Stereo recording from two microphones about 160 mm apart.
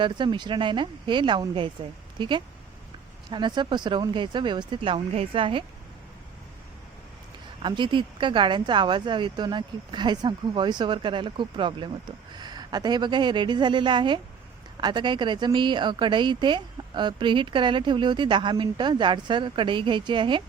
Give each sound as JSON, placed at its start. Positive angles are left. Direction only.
{"t": 0.0, "sound": "a woman's voice", "side_deg": -30}
{"t": 7.6, "sound": "a woman's voice", "side_deg": -30}